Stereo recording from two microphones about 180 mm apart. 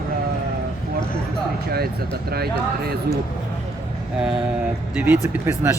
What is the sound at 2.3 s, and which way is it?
Speech, 60° right (ahead or behind).